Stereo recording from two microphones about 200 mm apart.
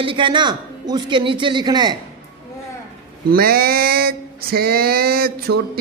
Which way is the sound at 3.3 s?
50° right (ahead or behind).